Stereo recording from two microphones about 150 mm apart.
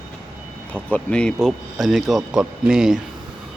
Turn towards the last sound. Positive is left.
turn(degrees=-5)  # may be behind; listen again after turning